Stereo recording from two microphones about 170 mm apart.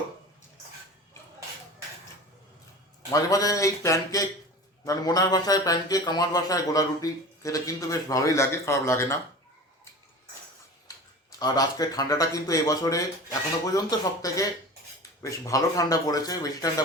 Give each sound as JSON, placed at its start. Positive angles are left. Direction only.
{"t": 3.1, "sound": "a man's voice", "side_deg": 20}
{"t": 10.8, "sound": "a man's voice", "side_deg": 20}